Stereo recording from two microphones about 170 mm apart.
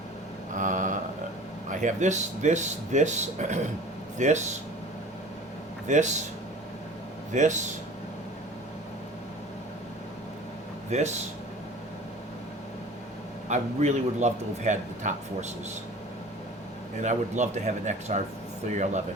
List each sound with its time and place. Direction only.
0.5 s mantra: 50° right (ahead or behind)
1.7 s a man's voice: 45° right (ahead or behind)
5.9 s a man's voice: 45° right (ahead or behind)
7.3 s a man's voice: 45° right (ahead or behind)
10.9 s speech: 40° right (ahead or behind)
13.5 s a man's voice: 45° right (ahead or behind)
17.0 s a man's voice: 45° right (ahead or behind)